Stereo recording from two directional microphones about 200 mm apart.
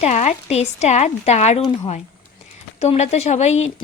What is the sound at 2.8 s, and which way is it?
Speech, 35° left (ahead or behind).